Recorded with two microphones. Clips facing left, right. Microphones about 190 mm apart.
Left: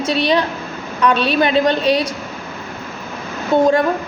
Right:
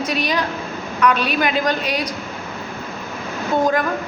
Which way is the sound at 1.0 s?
30° left (ahead or behind).